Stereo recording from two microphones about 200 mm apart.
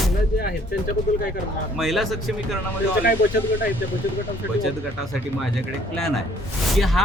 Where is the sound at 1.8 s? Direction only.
Centre (ahead or behind).